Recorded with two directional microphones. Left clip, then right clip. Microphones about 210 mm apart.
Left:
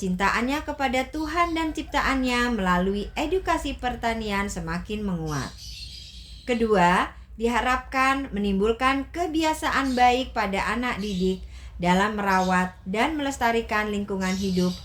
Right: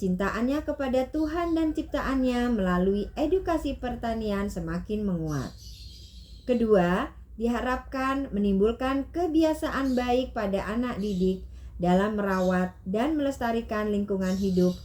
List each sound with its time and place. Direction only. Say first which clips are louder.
0.0 s speech: left 5 dB; 20° left (ahead or behind)
6.5 s speech: left 3 dB; 20° left (ahead or behind)